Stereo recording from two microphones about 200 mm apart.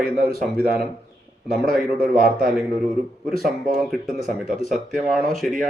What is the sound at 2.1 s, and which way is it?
Speech, 45° right (ahead or behind).